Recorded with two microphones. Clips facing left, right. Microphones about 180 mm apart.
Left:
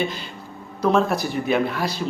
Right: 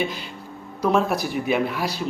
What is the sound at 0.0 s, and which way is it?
A man's voice, 5° right (ahead or behind).